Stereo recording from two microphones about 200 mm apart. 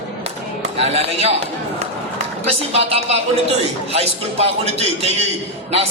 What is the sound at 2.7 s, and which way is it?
A man's voice, 30° right (ahead or behind).